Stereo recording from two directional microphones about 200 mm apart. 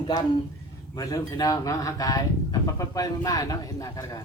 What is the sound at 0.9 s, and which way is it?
Speech, 20° left (ahead or behind).